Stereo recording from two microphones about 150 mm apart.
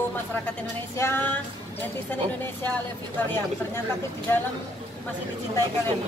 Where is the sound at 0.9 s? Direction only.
15° left (ahead or behind).